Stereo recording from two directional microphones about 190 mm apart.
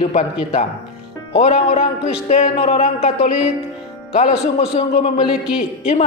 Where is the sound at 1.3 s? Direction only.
35° left (ahead or behind).